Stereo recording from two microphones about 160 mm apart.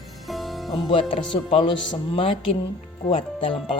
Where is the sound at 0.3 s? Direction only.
Centre (ahead or behind).